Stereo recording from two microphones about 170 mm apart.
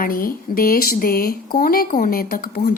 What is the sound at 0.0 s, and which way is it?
A woman's voice, 55° left (ahead or behind).